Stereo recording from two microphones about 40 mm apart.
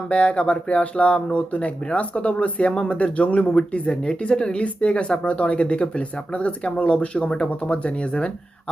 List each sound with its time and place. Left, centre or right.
0.1 s speech: left